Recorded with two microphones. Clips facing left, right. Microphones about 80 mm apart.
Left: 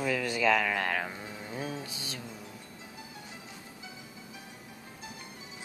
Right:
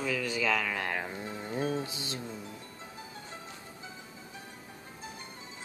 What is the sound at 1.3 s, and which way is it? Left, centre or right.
Music, right.